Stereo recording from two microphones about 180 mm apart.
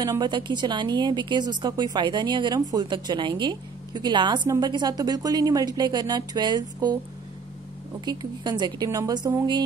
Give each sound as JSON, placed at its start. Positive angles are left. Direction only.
{"t": 0.0, "sound": "a woman's voice", "side_deg": -20}
{"t": 8.0, "sound": "a woman's voice", "side_deg": -25}